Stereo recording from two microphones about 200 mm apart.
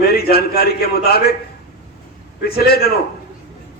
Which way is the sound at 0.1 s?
50° left (ahead or behind).